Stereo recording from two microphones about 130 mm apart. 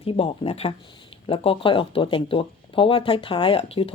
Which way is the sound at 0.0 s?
45° left (ahead or behind).